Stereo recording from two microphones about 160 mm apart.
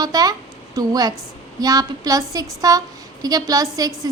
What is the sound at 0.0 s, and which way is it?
A woman's voice, 25° right (ahead or behind).